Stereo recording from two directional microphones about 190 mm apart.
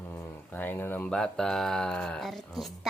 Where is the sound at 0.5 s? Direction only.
10° left (ahead or behind).